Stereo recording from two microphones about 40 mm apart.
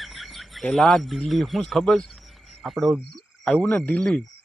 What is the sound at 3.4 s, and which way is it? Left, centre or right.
Speech, left.